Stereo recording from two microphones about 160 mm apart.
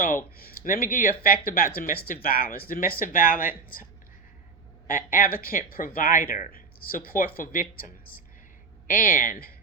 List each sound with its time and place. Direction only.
0.3 s speech: 65° left (ahead or behind)
4.9 s speech: 60° left (ahead or behind)